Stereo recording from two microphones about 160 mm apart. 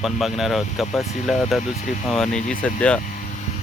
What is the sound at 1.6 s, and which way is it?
Speech, 50° left (ahead or behind).